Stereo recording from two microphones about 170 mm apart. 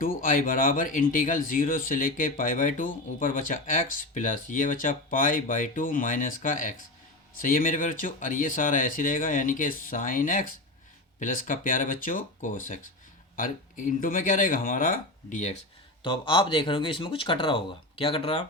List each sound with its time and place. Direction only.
0.0 s speech: 55° left (ahead or behind)
16.0 s speech: 30° left (ahead or behind)